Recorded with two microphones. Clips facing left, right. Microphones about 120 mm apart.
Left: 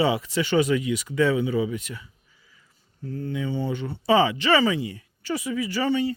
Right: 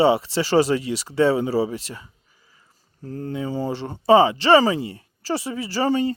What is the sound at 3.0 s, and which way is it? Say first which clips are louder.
A woman's voice: right 1 dB; 40° right (ahead or behind).